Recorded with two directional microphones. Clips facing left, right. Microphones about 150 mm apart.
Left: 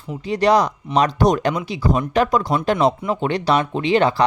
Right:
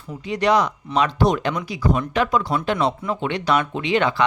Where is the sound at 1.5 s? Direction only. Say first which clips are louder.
Left 2 dB; 25° left (ahead or behind).